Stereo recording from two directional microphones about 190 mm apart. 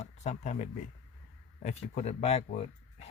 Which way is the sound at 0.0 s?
35° left (ahead or behind).